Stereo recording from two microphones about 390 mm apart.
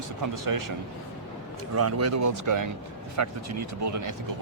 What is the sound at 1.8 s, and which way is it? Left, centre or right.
Speech, right.